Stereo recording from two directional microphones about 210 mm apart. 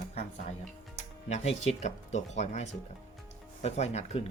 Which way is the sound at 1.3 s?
30° left (ahead or behind).